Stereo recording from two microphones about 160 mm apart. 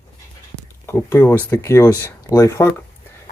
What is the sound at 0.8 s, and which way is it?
Speech, 15° left (ahead or behind).